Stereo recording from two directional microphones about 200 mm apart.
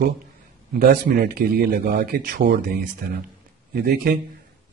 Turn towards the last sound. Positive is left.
turn(degrees=-50)  # may be behind; listen again after turning